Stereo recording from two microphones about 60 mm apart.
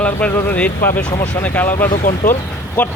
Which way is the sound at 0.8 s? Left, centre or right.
Left.